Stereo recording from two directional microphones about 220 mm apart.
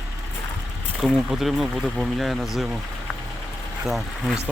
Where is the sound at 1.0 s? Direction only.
Centre (ahead or behind).